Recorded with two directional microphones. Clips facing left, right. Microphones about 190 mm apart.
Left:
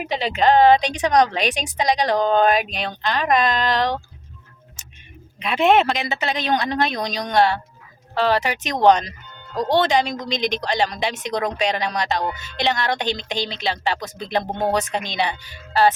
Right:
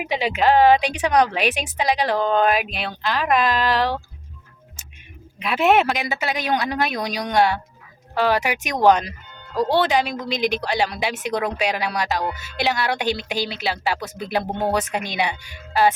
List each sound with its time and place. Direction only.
0.0 s a woman's voice: 10° right (ahead or behind)
5.4 s a woman's voice: 5° right (ahead or behind)